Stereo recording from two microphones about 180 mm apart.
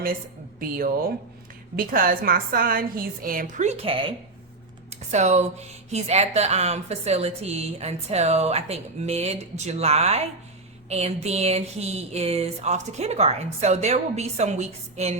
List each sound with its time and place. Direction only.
1.7 s a woman's voice: 55° right (ahead or behind); by 15.1 s 35° right (ahead or behind)